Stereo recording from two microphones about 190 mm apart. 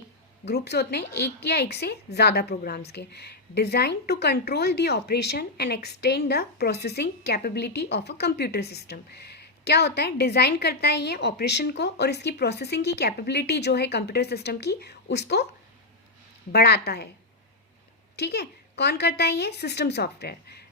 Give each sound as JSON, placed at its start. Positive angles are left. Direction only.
{"t": 0.4, "sound": "a woman's voice", "side_deg": 60}
{"t": 16.5, "sound": "a woman's voice", "side_deg": 60}
{"t": 18.2, "sound": "a woman's voice", "side_deg": 60}